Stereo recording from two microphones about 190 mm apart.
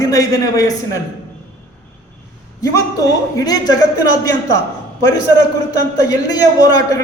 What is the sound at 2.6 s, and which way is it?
A man's voice, 20° left (ahead or behind).